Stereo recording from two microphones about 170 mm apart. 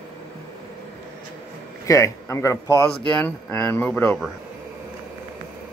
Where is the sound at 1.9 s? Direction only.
20° left (ahead or behind).